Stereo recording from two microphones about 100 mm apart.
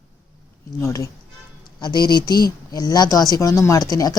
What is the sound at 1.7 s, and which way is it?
Speech, 45° left (ahead or behind).